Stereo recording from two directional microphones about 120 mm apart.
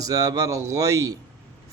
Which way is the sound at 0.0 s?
30° right (ahead or behind).